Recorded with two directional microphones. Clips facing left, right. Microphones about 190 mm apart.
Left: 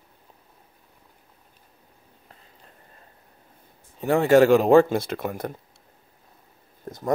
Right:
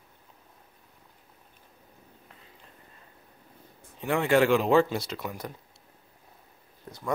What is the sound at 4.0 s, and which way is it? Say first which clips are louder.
Speech: left 6 dB; 40° left (ahead or behind).